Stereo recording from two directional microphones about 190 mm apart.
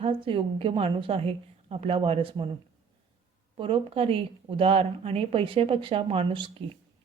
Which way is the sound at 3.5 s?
30° right (ahead or behind).